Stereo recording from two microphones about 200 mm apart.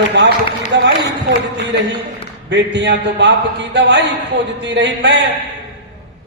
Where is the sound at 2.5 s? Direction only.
60° right (ahead or behind).